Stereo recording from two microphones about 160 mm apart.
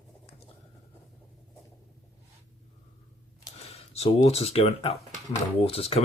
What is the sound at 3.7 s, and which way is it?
Speech, 40° left (ahead or behind).